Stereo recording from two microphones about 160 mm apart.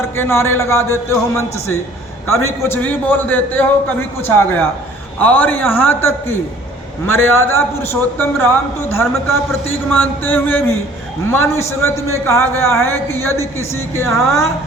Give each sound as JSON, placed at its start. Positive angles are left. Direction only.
{"t": 0.2, "sound": "speech", "side_deg": 15}
{"t": 2.2, "sound": "speech", "side_deg": 15}